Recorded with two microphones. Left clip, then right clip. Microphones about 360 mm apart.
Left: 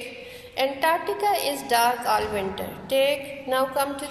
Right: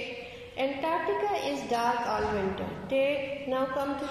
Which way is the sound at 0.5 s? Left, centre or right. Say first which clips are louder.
Left 7 dB; left.